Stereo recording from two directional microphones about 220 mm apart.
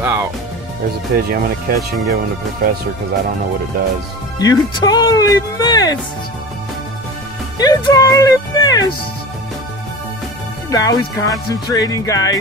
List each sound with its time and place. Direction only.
0.0 s music: 10° right (ahead or behind)
1.1 s speech: 45° right (ahead or behind)
4.4 s speech: 20° left (ahead or behind)
7.5 s speech: 15° left (ahead or behind)
10.7 s speech: 15° left (ahead or behind)